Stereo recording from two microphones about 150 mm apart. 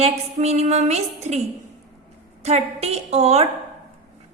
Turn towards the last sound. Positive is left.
turn(degrees=-45)  # may be behind; listen again after turning